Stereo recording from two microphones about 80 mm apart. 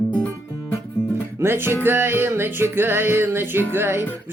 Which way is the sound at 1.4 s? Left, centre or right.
Right.